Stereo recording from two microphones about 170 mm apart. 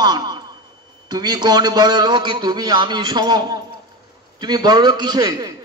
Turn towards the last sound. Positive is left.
turn(degrees=-25)  # may be behind; listen again after turning